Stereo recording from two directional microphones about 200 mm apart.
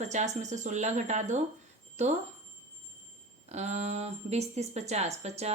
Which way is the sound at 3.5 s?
35° right (ahead or behind).